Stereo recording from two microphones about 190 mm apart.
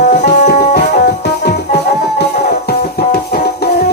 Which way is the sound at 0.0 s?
40° left (ahead or behind).